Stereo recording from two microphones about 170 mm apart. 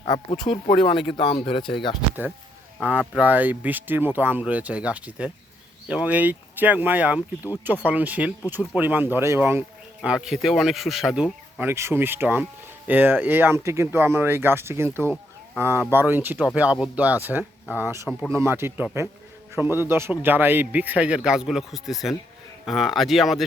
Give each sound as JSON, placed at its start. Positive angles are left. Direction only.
{"t": 0.0, "sound": "speech", "side_deg": 30}
{"t": 2.8, "sound": "speech", "side_deg": -10}